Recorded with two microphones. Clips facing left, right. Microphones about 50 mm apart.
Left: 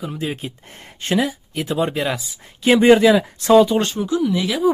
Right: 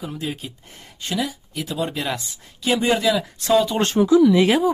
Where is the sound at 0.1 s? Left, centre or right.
Centre.